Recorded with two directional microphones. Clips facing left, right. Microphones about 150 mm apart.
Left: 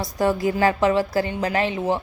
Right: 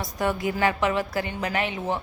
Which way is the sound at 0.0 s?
35° left (ahead or behind).